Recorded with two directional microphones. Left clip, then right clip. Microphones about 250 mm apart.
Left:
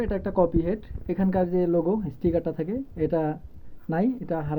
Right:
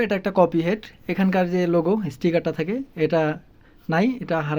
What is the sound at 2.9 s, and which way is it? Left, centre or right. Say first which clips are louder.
Speech: right 5 dB; centre.